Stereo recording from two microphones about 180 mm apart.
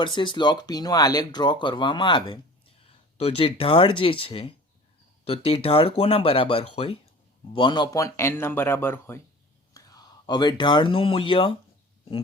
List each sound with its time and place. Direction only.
0.0 s speech: 25° left (ahead or behind)